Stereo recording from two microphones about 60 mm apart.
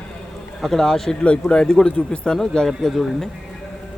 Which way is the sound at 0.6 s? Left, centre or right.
Centre.